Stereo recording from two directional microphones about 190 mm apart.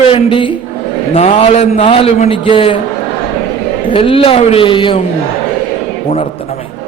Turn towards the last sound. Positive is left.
turn(degrees=25)  # may be behind; listen again after turning